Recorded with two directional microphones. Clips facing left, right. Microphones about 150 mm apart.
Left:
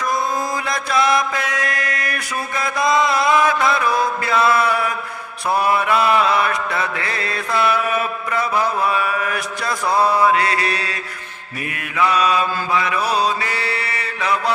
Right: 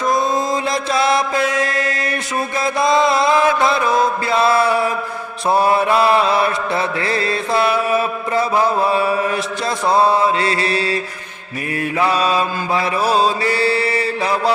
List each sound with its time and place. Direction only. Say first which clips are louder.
0.1 s mantra: right 4 dB; 25° right (ahead or behind)
11.9 s mantra: even; 30° right (ahead or behind)